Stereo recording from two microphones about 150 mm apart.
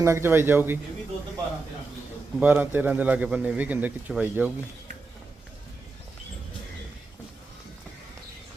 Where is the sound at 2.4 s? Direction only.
10° right (ahead or behind).